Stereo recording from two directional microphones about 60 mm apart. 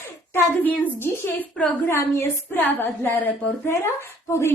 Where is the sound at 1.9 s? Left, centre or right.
Left.